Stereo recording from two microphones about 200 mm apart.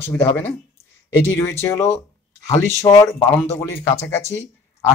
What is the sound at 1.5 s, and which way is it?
Speech, 10° left (ahead or behind).